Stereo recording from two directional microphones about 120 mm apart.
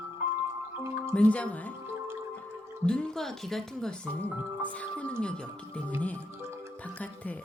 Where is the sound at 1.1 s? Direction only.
10° left (ahead or behind).